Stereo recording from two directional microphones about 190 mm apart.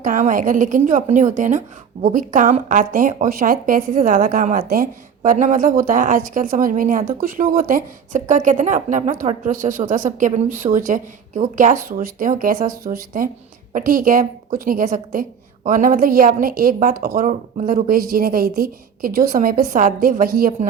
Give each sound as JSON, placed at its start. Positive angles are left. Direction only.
{"t": 0.0, "sound": "a woman's voice", "side_deg": -45}